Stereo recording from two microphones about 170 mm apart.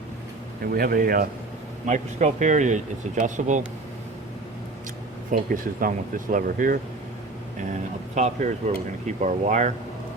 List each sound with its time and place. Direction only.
0.7 s speech: 60° right (ahead or behind)
1.9 s speech: 45° right (ahead or behind)
5.3 s speech: 55° right (ahead or behind)
8.1 s speech: 45° right (ahead or behind)